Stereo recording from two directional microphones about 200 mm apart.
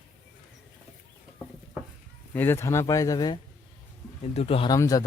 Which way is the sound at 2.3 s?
10° left (ahead or behind).